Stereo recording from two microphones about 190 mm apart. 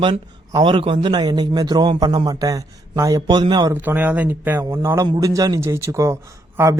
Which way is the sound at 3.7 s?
10° right (ahead or behind).